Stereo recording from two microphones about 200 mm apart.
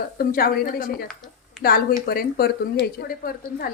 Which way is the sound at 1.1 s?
Centre (ahead or behind).